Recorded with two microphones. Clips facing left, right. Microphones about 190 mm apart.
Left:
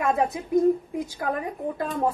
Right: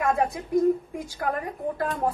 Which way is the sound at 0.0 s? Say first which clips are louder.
Left 1 dB; 20° left (ahead or behind).